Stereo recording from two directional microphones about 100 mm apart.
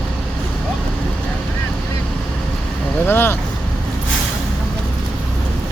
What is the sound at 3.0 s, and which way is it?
Vehicle, 20° left (ahead or behind).